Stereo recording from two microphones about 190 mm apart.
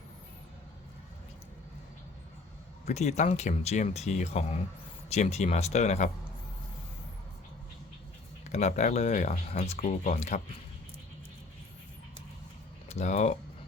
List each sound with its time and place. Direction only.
2.8 s speech: 35° left (ahead or behind)
8.4 s speech: 35° left (ahead or behind)
12.9 s speech: 35° left (ahead or behind)